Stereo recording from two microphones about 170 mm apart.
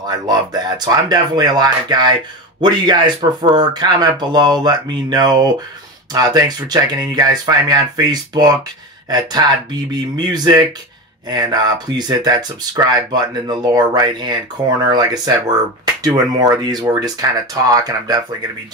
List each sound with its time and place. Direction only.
0.0 s speech: 25° right (ahead or behind)
16.3 s speech: 25° right (ahead or behind)